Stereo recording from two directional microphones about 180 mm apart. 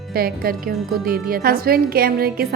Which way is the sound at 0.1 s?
55° right (ahead or behind).